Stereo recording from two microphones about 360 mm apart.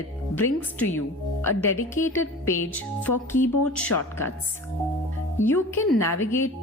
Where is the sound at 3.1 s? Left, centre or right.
Left.